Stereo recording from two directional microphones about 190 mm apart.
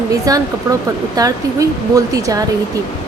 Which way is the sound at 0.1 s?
20° right (ahead or behind).